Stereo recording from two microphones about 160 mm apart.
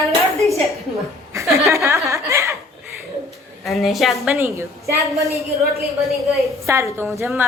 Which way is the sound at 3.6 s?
Centre (ahead or behind).